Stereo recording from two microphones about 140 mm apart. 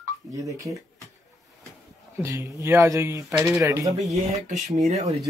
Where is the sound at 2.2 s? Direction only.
20° right (ahead or behind).